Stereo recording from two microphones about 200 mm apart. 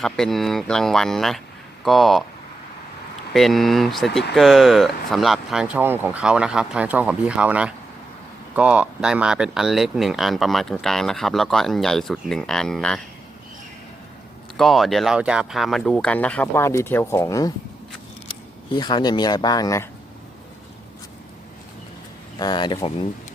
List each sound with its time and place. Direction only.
0.0 s speech: centre (ahead or behind)
3.3 s speech: centre (ahead or behind)
14.5 s speech: centre (ahead or behind); by 19.9 s 15° left (ahead or behind)
22.4 s speech: 20° left (ahead or behind)